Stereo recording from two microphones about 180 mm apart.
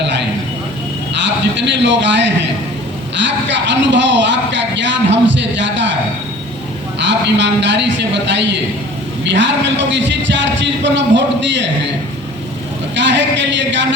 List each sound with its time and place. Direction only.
1.1 s a man's voice: 80° right
7.0 s a man's voice: 80° right
9.3 s a man's voice: 90° right
13.0 s a man's voice: 85° right